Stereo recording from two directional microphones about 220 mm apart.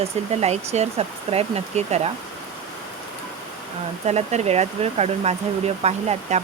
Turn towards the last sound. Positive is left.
turn(degrees=-30)  # may be behind; listen again after turning